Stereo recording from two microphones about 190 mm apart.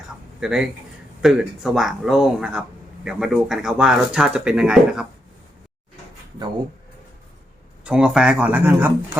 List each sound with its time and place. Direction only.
0.3 s speech: 5° right (ahead or behind)
7.9 s speech: 5° right (ahead or behind)